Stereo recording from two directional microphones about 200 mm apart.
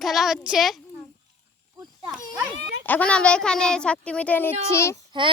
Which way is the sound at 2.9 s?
5° left (ahead or behind).